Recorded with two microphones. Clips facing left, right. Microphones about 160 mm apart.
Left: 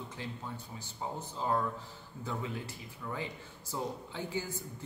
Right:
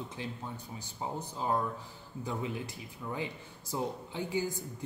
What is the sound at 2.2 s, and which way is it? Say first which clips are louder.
Speech: right 2 dB; 15° right (ahead or behind).